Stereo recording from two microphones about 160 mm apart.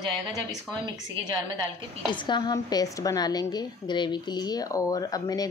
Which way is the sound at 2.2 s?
25° left (ahead or behind).